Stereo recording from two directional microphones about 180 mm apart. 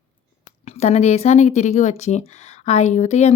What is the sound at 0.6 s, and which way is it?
Speech, 35° left (ahead or behind).